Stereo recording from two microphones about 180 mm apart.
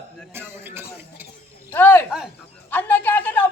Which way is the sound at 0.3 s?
10° right (ahead or behind).